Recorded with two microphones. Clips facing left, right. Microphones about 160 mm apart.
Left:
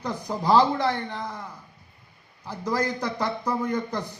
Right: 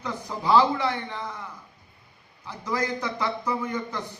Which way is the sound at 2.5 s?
40° left (ahead or behind).